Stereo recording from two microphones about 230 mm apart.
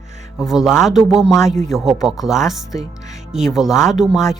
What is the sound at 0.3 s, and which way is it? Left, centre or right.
Speech, centre.